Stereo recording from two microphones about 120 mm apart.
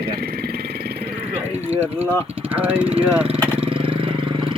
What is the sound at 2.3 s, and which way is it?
Speech, 10° right (ahead or behind).